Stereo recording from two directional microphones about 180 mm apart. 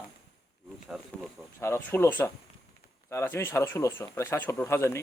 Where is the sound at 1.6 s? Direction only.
15° left (ahead or behind).